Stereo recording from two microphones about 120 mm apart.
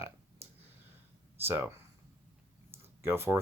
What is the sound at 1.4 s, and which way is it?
Speech, 20° right (ahead or behind).